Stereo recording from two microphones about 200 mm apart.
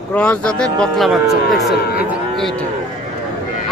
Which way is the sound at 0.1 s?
5° left (ahead or behind).